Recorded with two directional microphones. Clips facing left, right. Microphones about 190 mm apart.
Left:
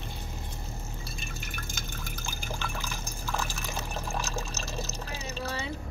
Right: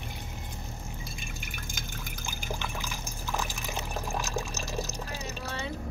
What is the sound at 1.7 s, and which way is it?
Pour, 15° right (ahead or behind).